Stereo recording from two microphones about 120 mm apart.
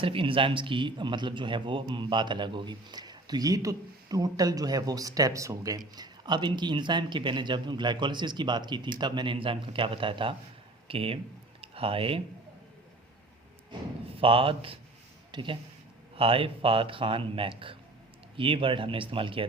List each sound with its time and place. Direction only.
0.0 s speech: 50° right (ahead or behind); by 5.8 s 30° right (ahead or behind)
6.0 s speech: 40° right (ahead or behind)
14.2 s speech: 50° right (ahead or behind)